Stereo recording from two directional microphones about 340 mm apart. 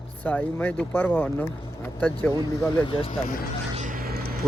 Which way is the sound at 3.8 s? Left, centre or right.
Right.